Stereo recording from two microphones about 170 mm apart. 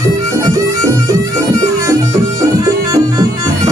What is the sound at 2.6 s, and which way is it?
Music, 20° right (ahead or behind).